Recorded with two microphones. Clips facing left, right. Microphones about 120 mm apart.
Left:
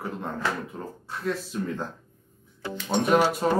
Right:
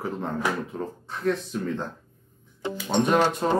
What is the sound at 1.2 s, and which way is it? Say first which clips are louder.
Speech: right 3 dB; 5° left (ahead or behind).